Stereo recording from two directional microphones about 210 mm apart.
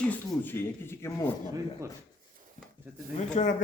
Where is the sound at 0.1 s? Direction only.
10° left (ahead or behind).